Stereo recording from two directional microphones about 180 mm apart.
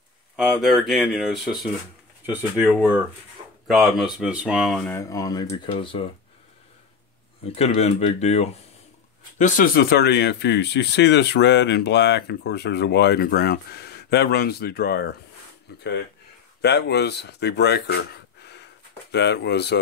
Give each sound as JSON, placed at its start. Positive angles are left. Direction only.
{"t": 0.4, "sound": "speech", "side_deg": 0}
{"t": 4.9, "sound": "speech", "side_deg": 20}
{"t": 7.4, "sound": "speech", "side_deg": 35}
{"t": 9.4, "sound": "speech", "side_deg": 55}
{"t": 16.6, "sound": "speech", "side_deg": 70}